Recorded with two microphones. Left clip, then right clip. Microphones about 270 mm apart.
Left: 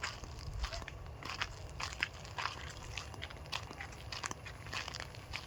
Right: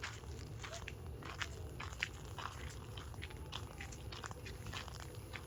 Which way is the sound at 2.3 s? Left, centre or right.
Left.